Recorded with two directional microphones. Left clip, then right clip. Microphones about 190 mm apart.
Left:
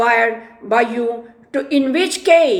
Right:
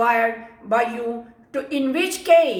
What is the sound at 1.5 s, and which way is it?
A woman's voice, 45° left (ahead or behind).